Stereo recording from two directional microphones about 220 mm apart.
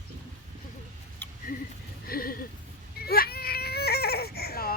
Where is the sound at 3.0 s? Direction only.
45° left (ahead or behind).